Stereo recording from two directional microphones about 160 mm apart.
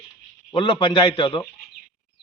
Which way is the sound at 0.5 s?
30° left (ahead or behind).